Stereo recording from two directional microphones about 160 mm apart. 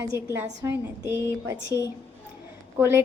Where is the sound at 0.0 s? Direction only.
20° right (ahead or behind).